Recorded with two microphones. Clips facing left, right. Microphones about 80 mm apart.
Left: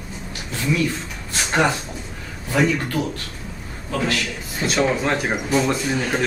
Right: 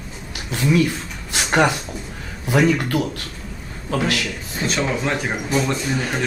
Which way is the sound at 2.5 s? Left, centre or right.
Centre.